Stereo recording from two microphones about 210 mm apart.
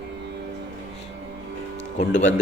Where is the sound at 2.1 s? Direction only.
65° left (ahead or behind).